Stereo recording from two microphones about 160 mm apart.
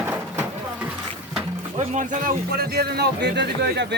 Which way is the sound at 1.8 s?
50° right (ahead or behind).